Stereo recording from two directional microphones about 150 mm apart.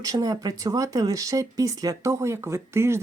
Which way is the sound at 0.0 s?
25° right (ahead or behind).